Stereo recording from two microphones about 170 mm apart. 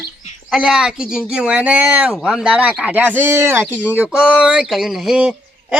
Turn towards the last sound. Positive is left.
turn(degrees=-5)  # may be behind; listen again after turning